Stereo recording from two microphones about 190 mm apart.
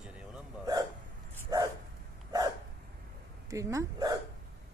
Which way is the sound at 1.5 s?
20° right (ahead or behind).